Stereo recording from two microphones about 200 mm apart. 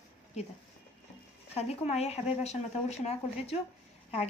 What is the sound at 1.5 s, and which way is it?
A woman's voice, 30° left (ahead or behind).